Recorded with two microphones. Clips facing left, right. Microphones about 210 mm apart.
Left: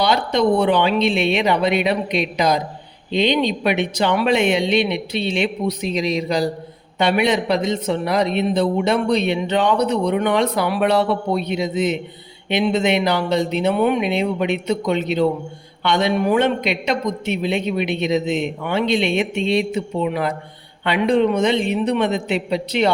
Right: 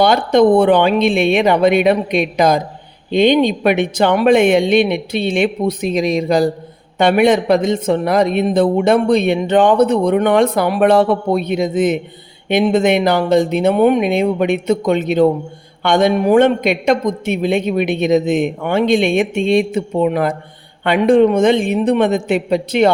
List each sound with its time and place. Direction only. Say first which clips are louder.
0.0 s a man's voice: right 6 dB; 50° right (ahead or behind)